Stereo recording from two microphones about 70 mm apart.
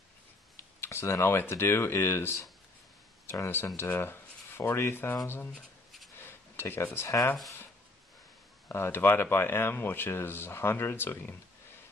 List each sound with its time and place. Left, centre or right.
0.6 s computer keyboard: left
1.3 s speech: left
6.1 s a sound: left
8.6 s speech: left